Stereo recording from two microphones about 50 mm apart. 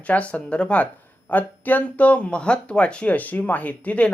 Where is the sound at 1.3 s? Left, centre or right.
Left.